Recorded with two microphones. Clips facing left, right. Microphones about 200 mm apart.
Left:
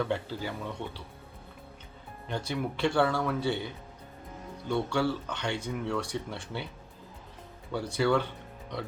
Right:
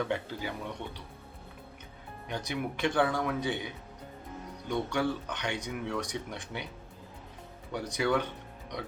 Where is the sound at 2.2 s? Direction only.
15° right (ahead or behind).